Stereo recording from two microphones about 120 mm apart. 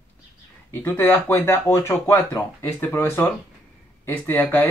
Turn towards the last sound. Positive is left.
turn(degrees=15)  # may be behind; listen again after turning